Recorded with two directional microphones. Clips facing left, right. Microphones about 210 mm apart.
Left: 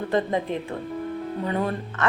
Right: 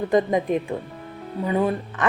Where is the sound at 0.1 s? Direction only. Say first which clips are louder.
Right 4 dB; 15° right (ahead or behind).